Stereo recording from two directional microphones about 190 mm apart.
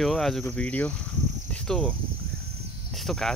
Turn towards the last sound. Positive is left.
turn(degrees=0)  # may be behind; listen again after turning